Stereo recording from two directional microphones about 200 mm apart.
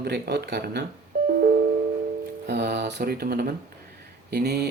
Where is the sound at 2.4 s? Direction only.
55° right (ahead or behind).